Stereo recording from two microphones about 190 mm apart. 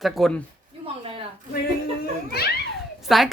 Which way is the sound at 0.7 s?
30° right (ahead or behind).